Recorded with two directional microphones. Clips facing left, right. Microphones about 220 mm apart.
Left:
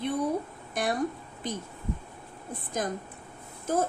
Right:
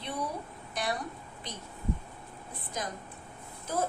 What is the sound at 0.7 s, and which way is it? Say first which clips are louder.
Speech: left 4 dB; 50° left (ahead or behind).